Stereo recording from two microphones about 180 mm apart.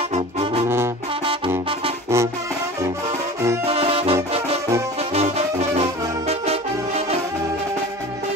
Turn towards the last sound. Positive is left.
turn(degrees=-35)  # may be behind; listen again after turning